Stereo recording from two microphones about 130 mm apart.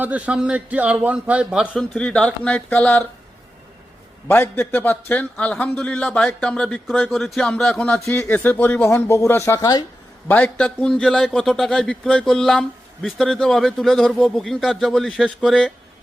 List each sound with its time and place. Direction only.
0.0 s a man's voice: 10° right (ahead or behind)
1.7 s a man's voice: 10° left (ahead or behind)
4.3 s a man's voice: 15° left (ahead or behind)
10.2 s a man's voice: 10° left (ahead or behind)